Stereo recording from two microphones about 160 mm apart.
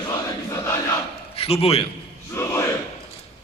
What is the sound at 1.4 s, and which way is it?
Speech, 40° left (ahead or behind).